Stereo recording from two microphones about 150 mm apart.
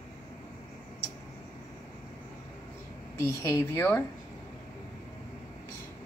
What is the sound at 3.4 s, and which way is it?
Speech, 20° left (ahead or behind).